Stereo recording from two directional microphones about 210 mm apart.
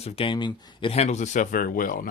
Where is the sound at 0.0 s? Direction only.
25° left (ahead or behind).